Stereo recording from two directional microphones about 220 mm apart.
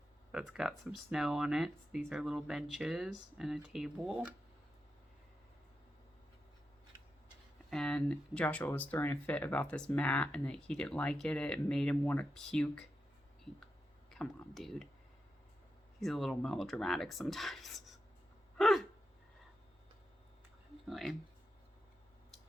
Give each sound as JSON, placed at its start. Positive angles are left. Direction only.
{"t": 0.3, "sound": "speech", "side_deg": -5}
{"t": 7.7, "sound": "speech", "side_deg": 5}
{"t": 14.1, "sound": "speech", "side_deg": 0}
{"t": 16.0, "sound": "speech", "side_deg": 0}
{"t": 18.5, "sound": "gasp", "side_deg": 0}
{"t": 20.9, "sound": "speech", "side_deg": 0}